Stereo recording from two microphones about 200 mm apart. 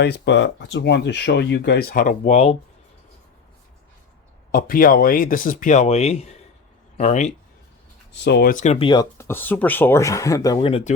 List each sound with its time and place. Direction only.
0.0 s speech: 60° left (ahead or behind); by 2.6 s 30° left (ahead or behind)
4.5 s speech: 45° left (ahead or behind)
8.2 s speech: 55° left (ahead or behind); by 10.9 s 30° left (ahead or behind)